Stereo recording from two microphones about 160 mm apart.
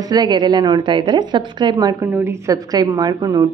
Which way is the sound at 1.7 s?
15° right (ahead or behind).